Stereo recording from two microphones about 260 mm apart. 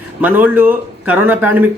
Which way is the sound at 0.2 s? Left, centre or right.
Centre.